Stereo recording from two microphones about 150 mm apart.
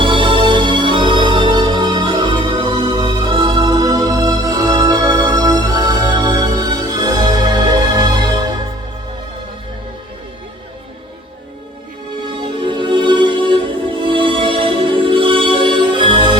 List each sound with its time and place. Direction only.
0.0 s music: 35° right (ahead or behind)
12.4 s music: 30° right (ahead or behind)